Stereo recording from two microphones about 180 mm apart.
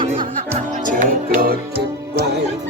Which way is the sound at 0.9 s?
55° right (ahead or behind).